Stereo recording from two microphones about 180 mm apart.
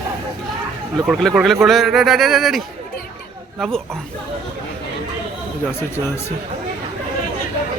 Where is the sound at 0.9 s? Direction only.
Centre (ahead or behind).